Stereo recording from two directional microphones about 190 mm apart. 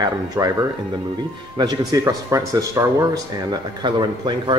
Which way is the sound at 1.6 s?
20° right (ahead or behind).